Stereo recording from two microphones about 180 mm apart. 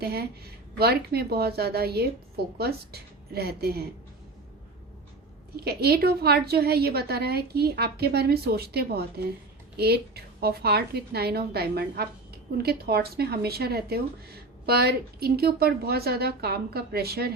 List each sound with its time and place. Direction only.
0.0 s speech: 60° right (ahead or behind)
5.5 s speech: 60° right (ahead or behind)